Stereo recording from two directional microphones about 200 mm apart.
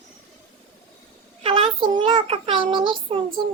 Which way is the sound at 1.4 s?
25° right (ahead or behind).